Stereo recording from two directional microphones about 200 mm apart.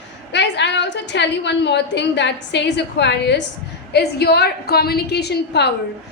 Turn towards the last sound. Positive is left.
turn(degrees=55)  # may be behind; listen again after turning